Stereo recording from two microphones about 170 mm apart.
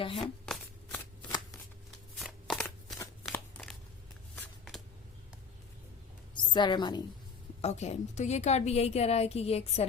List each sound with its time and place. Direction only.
0.2 s a sound: centre (ahead or behind)
2.1 s shuffling cards: centre (ahead or behind)
3.3 s crumpling: 5° left (ahead or behind)
6.3 s a woman's voice: 25° left (ahead or behind)
7.6 s a woman's voice: 40° left (ahead or behind)